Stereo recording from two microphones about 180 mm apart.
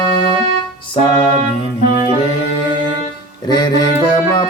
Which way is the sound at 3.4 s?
25° left (ahead or behind).